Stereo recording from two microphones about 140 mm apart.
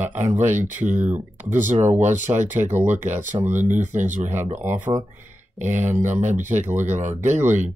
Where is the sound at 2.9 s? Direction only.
60° right (ahead or behind).